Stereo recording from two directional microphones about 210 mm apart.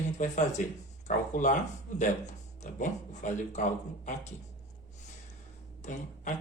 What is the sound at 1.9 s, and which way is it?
A man's voice, 35° left (ahead or behind).